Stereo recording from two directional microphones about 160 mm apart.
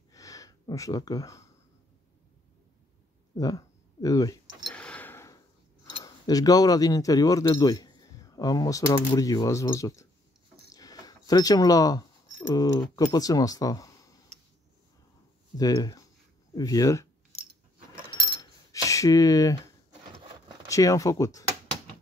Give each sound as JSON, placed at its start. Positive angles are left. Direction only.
{"t": 0.1, "sound": "a sound", "side_deg": 20}
{"t": 3.3, "sound": "speech", "side_deg": 20}
{"t": 4.6, "sound": "tick", "side_deg": 5}
{"t": 5.9, "sound": "speech", "side_deg": 25}
{"t": 15.5, "sound": "speech", "side_deg": 25}
{"t": 18.1, "sound": "coin", "side_deg": 30}
{"t": 20.6, "sound": "speech", "side_deg": 20}